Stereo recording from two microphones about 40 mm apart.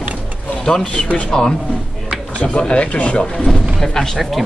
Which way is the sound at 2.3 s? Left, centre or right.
Left.